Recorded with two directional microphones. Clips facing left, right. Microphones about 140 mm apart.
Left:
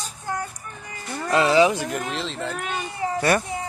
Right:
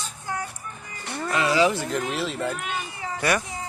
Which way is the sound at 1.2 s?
30° left (ahead or behind).